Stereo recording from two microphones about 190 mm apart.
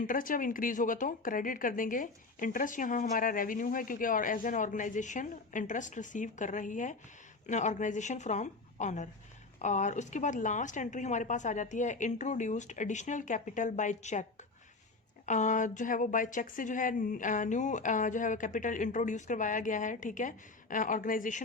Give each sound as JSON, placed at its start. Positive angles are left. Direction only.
{"t": 0.1, "sound": "a woman's voice", "side_deg": 45}
{"t": 15.3, "sound": "speech", "side_deg": 40}